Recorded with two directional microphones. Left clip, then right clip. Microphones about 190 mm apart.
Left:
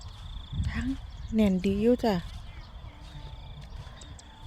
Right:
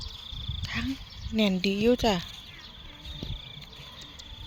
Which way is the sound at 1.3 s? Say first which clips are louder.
Right 1 dB; 20° left (ahead or behind).